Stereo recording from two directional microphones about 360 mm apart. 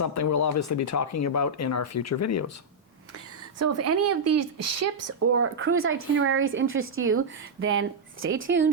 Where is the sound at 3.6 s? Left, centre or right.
Right.